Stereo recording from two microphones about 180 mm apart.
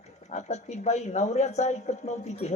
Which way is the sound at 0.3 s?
40° left (ahead or behind).